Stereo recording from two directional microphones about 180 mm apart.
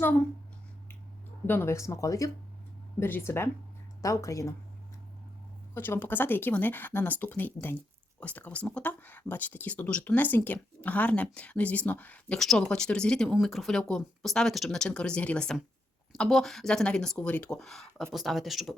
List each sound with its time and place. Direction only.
1.5 s speech: 15° left (ahead or behind)
5.7 s speech: 10° left (ahead or behind)